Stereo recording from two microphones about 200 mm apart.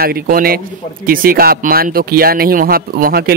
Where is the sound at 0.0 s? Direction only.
50° right (ahead or behind).